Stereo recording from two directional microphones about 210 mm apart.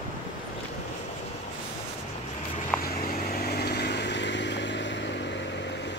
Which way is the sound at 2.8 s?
45° left (ahead or behind).